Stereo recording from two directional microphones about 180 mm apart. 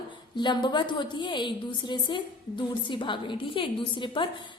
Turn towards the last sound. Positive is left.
turn(degrees=30)  # may be behind; listen again after turning